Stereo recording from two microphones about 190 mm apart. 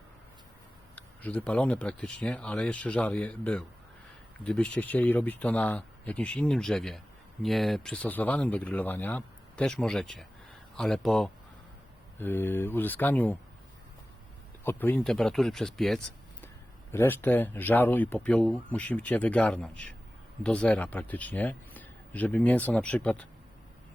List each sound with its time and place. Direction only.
0.9 s speech: 10° left (ahead or behind)
14.6 s speech: 10° left (ahead or behind)